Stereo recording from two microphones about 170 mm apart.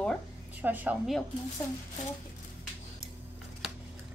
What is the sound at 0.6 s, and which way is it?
Speech, 10° right (ahead or behind).